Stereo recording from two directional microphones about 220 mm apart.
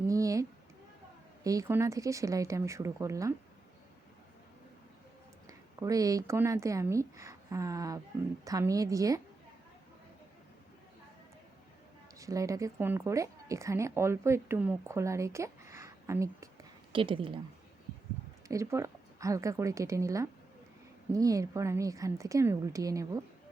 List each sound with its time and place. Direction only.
0.1 s a sound: 15° right (ahead or behind)
1.5 s a woman's voice: 15° right (ahead or behind)
5.5 s a woman's voice: 15° right (ahead or behind)
12.2 s a woman's voice: 15° right (ahead or behind)
18.4 s a woman's voice: 15° right (ahead or behind)